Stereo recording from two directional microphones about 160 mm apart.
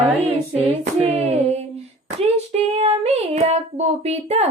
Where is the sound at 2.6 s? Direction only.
40° right (ahead or behind).